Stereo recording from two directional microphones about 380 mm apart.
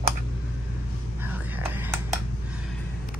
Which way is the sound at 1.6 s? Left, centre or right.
Centre.